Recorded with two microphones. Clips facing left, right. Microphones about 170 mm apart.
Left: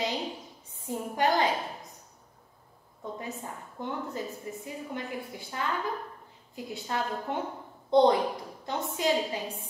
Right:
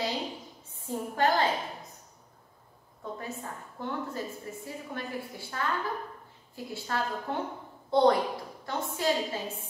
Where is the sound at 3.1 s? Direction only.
20° left (ahead or behind).